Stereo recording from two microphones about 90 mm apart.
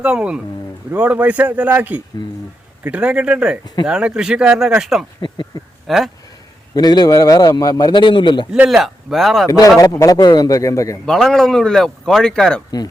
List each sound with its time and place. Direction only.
0.0 s a man's voice: 10° right (ahead or behind)
5.5 s speech: 45° left (ahead or behind)
6.7 s a man's voice: 50° left (ahead or behind)
8.7 s speech: centre (ahead or behind)
9.5 s speech: 40° left (ahead or behind)
11.0 s speech: 5° left (ahead or behind)